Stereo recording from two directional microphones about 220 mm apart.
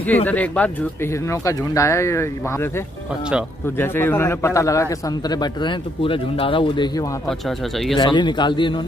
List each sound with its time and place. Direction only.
0.0 s a man's voice: 10° left (ahead or behind)
3.7 s a man's voice: 10° left (ahead or behind)
7.2 s speech: centre (ahead or behind)
8.0 s a man's voice: 20° left (ahead or behind)